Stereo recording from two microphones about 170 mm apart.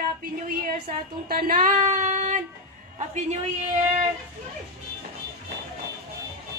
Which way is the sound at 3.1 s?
45° right (ahead or behind).